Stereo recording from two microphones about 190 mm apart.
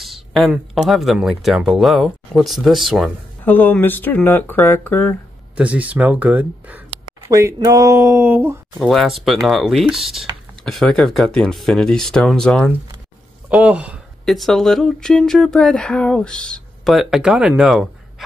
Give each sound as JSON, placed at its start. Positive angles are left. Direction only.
{"t": 0.0, "sound": "speech", "side_deg": 0}
{"t": 5.6, "sound": "speech", "side_deg": -5}
{"t": 8.8, "sound": "speech", "side_deg": 0}